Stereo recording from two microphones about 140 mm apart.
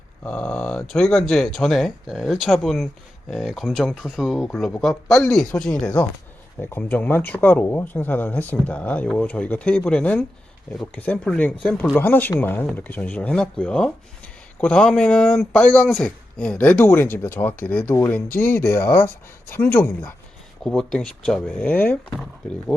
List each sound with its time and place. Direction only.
0.3 s speech: 10° left (ahead or behind)
20.7 s speech: 5° left (ahead or behind)